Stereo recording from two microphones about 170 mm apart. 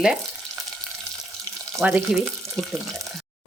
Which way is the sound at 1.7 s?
5° right (ahead or behind).